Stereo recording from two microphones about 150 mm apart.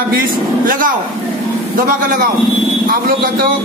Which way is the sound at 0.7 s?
65° right (ahead or behind).